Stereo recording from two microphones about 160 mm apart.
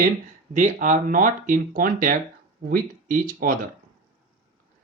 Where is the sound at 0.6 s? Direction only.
50° right (ahead or behind).